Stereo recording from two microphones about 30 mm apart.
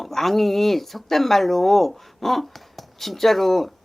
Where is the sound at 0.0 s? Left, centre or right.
Centre.